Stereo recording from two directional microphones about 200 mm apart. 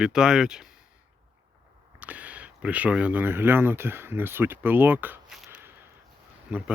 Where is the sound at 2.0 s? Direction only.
5° right (ahead or behind).